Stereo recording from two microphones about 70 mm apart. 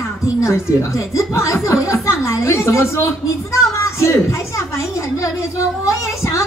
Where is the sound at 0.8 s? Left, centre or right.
Left.